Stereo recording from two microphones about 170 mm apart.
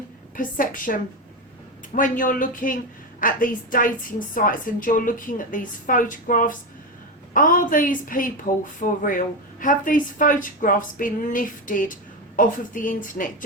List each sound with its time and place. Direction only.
0.3 s a woman's voice: 55° left (ahead or behind)
2.0 s a woman's voice: 50° left (ahead or behind)